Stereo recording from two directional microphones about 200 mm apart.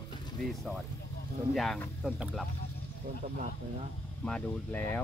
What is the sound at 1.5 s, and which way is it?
Speech, centre (ahead or behind).